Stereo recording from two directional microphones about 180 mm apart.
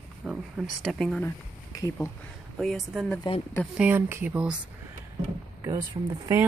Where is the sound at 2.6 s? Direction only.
Centre (ahead or behind).